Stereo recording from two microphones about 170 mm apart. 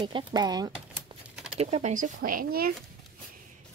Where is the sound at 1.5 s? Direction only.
35° right (ahead or behind); by 2.7 s 60° right (ahead or behind).